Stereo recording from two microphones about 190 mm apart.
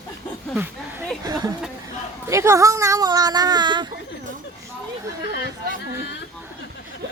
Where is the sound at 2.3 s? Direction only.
15° right (ahead or behind).